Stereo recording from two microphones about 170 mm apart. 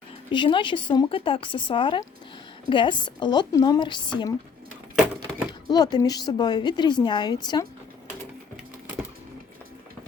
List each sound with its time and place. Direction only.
0.3 s speech: 30° left (ahead or behind)
5.5 s speech: 25° left (ahead or behind)